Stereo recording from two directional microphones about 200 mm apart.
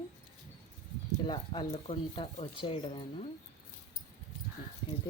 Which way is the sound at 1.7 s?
30° left (ahead or behind).